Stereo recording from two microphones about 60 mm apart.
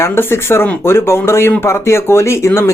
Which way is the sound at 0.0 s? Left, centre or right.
Left.